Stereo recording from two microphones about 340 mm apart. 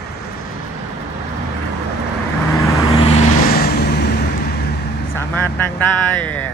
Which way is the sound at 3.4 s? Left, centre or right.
Left.